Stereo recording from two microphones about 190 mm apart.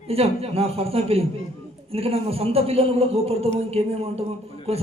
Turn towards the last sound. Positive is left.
turn(degrees=-30)  # may be behind; listen again after turning